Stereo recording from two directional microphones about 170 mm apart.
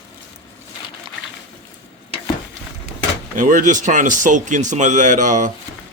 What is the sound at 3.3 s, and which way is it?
Speech, 50° right (ahead or behind).